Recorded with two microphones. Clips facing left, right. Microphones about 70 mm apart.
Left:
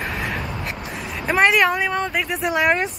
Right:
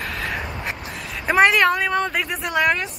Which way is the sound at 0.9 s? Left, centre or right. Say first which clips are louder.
Right 1 dB; centre.